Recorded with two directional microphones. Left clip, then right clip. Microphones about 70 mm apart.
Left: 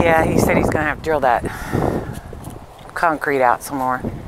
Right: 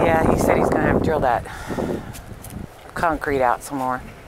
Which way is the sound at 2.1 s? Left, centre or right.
Right.